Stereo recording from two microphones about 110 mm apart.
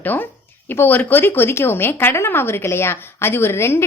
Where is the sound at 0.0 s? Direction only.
15° left (ahead or behind).